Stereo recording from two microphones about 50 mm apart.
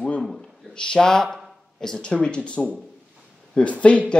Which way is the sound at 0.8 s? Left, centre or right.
Centre.